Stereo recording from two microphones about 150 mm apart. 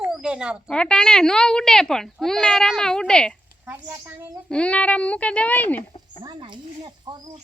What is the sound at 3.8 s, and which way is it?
Speech, 20° right (ahead or behind).